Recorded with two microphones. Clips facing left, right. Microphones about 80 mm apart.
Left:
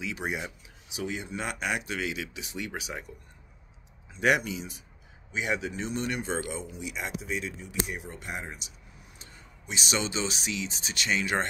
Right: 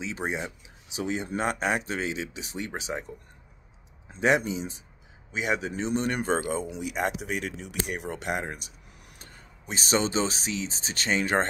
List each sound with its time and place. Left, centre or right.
0.0 s speech: right
4.4 s speech: right
7.2 s speech: right